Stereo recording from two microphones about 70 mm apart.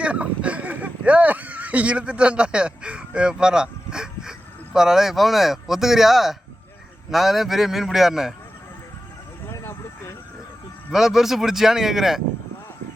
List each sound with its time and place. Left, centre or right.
0.0 s speech: centre
9.5 s a sound: left
10.9 s speech: centre